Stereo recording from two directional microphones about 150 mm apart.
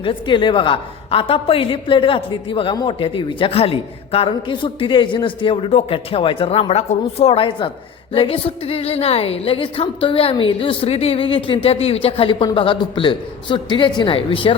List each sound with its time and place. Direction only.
0.0 s a woman's voice: 35° left (ahead or behind)